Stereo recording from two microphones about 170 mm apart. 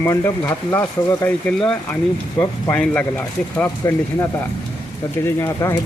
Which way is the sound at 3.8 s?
15° left (ahead or behind).